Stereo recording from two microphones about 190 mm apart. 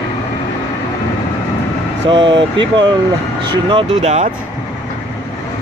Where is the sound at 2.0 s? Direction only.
25° right (ahead or behind).